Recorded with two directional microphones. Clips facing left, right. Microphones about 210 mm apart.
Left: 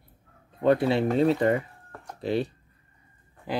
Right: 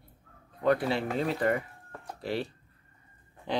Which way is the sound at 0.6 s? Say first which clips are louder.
Left 5 dB; 25° left (ahead or behind).